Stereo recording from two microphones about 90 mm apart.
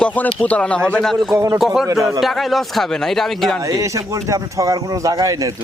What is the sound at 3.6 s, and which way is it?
Speech, 40° right (ahead or behind).